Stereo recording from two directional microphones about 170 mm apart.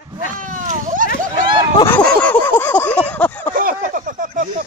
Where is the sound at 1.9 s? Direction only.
5° left (ahead or behind).